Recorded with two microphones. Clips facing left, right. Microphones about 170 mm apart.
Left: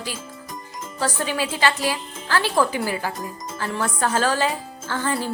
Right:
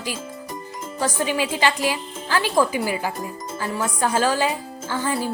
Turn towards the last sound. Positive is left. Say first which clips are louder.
# right 1 dB
turn(degrees=-10)  # may be behind; listen again after turning